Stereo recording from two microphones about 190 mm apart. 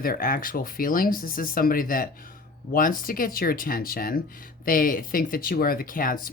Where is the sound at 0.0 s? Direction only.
50° left (ahead or behind).